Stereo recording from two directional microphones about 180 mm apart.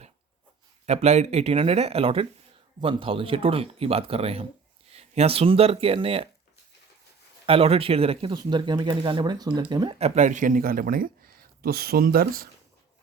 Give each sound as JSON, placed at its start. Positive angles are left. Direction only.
{"t": 0.9, "sound": "speech", "side_deg": -40}
{"t": 7.4, "sound": "speech", "side_deg": -35}